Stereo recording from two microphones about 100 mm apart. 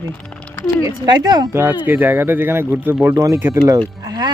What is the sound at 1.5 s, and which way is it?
Speech, 25° right (ahead or behind).